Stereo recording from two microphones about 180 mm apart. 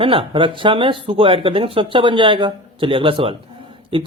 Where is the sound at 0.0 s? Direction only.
30° right (ahead or behind).